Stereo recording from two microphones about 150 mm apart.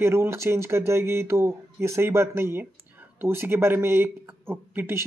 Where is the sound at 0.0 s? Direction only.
15° right (ahead or behind).